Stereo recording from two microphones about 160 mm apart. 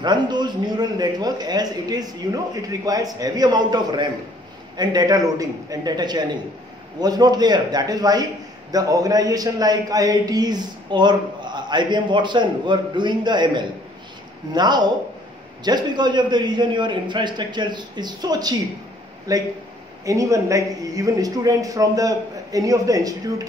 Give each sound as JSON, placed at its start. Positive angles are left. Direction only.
{"t": 0.0, "sound": "a man's voice", "side_deg": -25}